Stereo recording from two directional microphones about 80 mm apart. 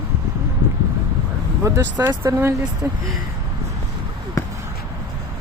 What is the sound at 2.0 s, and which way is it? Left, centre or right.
Speech, right.